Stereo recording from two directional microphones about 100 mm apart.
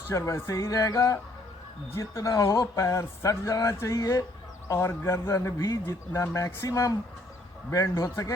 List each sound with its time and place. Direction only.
0.1 s a man's voice: 30° left (ahead or behind)